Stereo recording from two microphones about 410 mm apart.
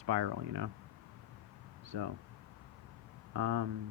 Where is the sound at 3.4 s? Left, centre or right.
Right.